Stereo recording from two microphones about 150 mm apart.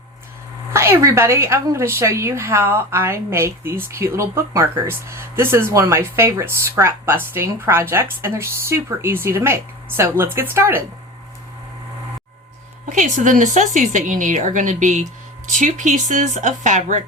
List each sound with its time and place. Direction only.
0.7 s a woman's voice: 20° right (ahead or behind)
12.9 s speech: 60° right (ahead or behind)